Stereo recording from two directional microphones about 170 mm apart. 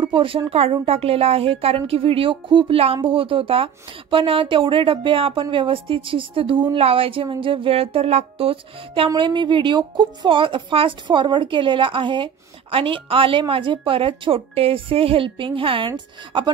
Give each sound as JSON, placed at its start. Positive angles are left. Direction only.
{"t": 0.0, "sound": "a woman's voice", "side_deg": -30}